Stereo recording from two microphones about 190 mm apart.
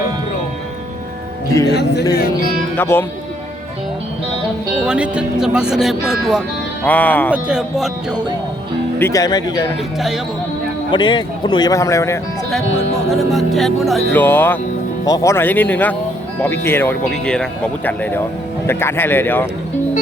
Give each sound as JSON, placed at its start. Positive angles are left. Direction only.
{"t": 1.6, "sound": "speech", "side_deg": 60}
{"t": 2.7, "sound": "speech", "side_deg": 10}
{"t": 4.8, "sound": "speech", "side_deg": -5}
{"t": 6.8, "sound": "speech", "side_deg": 10}
{"t": 7.3, "sound": "speech", "side_deg": -5}
{"t": 9.0, "sound": "speech", "side_deg": 15}
{"t": 10.9, "sound": "speech", "side_deg": 25}
{"t": 12.5, "sound": "speech", "side_deg": 5}